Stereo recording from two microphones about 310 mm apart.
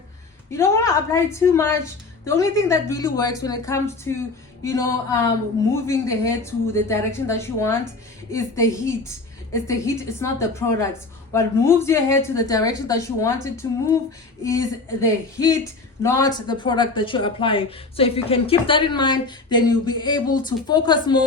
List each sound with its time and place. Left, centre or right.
0.5 s speech: centre
15.0 s speech: centre